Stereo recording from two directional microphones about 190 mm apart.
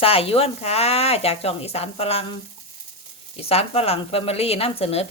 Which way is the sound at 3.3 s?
30° left (ahead or behind).